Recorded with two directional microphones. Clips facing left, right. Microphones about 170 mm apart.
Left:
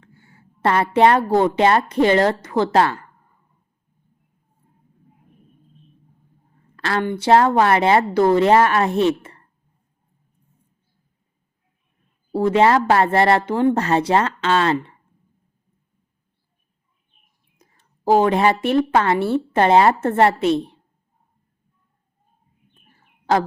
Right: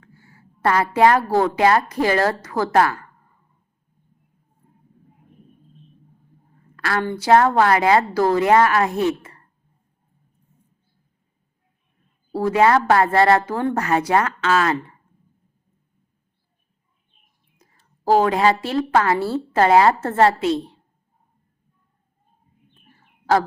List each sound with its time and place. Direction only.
0.0 s a woman's voice: 25° left (ahead or behind)
6.7 s a woman's voice: 25° left (ahead or behind)
12.3 s a woman's voice: 25° left (ahead or behind)
17.6 s whispering: 20° left (ahead or behind)
18.2 s a woman's voice: 20° left (ahead or behind)
22.9 s bird: 25° left (ahead or behind)